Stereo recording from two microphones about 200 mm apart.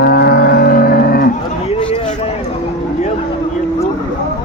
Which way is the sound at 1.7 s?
30° left (ahead or behind).